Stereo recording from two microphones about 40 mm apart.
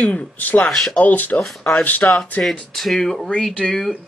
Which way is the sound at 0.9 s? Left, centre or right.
Left.